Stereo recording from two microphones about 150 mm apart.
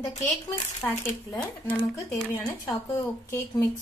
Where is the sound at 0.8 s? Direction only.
15° left (ahead or behind).